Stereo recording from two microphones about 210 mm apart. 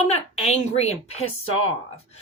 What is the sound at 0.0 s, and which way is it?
A woman's voice, 30° left (ahead or behind).